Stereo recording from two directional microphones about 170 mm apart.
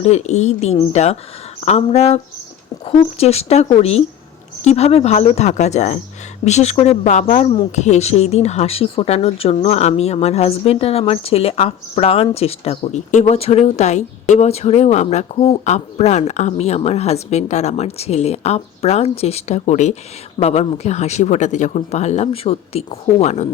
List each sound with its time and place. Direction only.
0.0 s speech: 40° left (ahead or behind)